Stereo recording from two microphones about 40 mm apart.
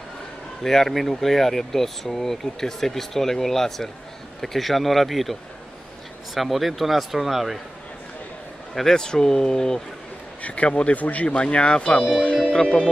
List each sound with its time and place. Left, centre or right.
0.6 s speech: centre
8.7 s speech: centre
10.4 s speech: left
11.2 s speech: left